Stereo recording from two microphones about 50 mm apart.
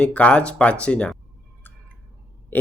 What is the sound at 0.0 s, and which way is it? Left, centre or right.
Speech, left.